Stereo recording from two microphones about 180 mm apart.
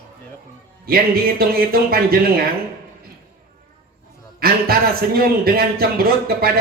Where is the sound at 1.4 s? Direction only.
55° right (ahead or behind).